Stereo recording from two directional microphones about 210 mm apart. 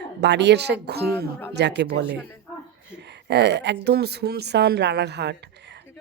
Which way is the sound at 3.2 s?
55° right (ahead or behind).